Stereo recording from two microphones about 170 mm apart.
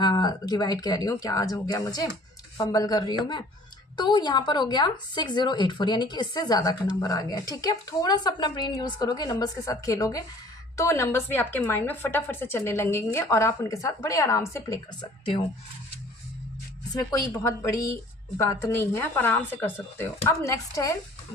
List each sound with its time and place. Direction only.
0.0 s a woman's voice: 25° left (ahead or behind)
15.2 s speech: 30° left (ahead or behind)
16.9 s a woman's voice: 20° left (ahead or behind)